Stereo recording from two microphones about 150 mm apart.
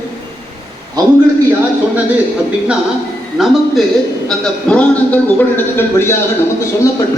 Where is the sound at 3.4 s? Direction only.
5° right (ahead or behind).